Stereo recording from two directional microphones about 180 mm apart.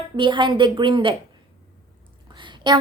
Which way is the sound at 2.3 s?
25° right (ahead or behind).